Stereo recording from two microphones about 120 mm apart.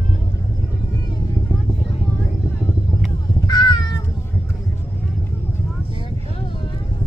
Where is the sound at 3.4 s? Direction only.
35° left (ahead or behind).